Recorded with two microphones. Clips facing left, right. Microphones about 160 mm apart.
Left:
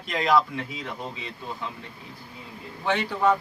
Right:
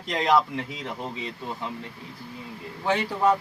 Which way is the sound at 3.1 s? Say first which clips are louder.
Even; 15° right (ahead or behind).